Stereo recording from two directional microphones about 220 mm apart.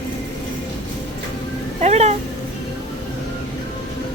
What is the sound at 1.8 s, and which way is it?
Cat, 30° right (ahead or behind).